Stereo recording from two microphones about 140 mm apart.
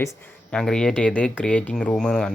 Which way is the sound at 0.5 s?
5° left (ahead or behind).